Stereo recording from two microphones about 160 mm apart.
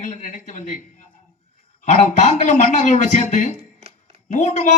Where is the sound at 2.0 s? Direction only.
50° left (ahead or behind).